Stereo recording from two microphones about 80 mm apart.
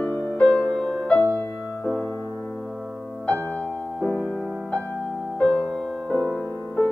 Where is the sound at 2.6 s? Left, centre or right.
Centre.